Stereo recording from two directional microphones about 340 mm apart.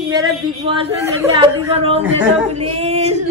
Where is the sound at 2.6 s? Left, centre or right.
Centre.